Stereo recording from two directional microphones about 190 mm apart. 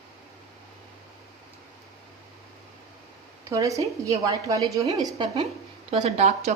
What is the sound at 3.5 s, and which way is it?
A woman's voice, 15° right (ahead or behind).